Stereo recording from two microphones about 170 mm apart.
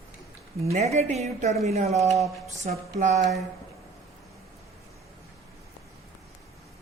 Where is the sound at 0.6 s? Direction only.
40° right (ahead or behind).